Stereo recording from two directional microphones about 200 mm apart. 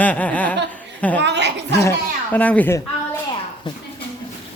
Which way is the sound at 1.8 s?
10° left (ahead or behind).